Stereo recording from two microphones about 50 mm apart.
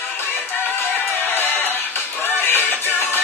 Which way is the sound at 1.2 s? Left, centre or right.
Left.